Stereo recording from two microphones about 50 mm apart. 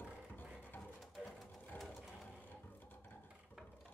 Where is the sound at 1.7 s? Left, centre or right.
Centre.